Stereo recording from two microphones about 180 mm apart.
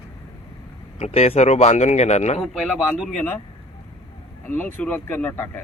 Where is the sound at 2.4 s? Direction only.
Centre (ahead or behind).